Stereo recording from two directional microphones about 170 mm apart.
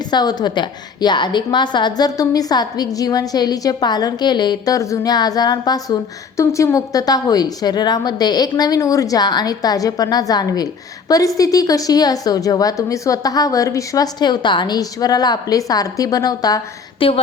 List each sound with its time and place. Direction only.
0.1 s a woman's voice: 25° left (ahead or behind)